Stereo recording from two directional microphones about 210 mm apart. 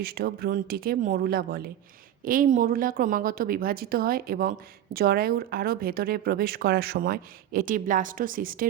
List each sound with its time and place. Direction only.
0.0 s a woman's voice: 45° right (ahead or behind)